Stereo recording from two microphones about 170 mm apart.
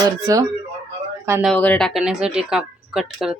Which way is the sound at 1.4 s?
10° left (ahead or behind).